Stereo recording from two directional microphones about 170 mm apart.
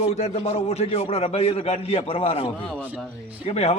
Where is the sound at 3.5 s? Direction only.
35° left (ahead or behind).